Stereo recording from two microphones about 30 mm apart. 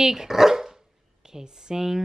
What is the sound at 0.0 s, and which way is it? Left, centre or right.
Speech, centre.